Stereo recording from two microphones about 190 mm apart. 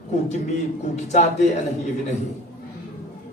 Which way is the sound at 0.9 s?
35° left (ahead or behind).